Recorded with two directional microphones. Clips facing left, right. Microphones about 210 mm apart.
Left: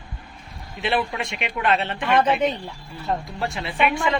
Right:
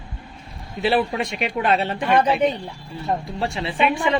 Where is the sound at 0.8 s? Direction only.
35° right (ahead or behind).